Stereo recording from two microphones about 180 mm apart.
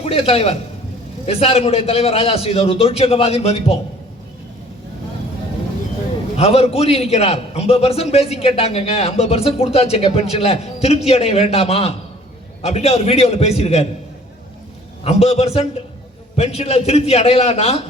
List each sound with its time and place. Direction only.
0.0 s a man's voice: 30° left (ahead or behind)
6.3 s a man's voice: 35° left (ahead or behind)
15.0 s a man's voice: 35° left (ahead or behind)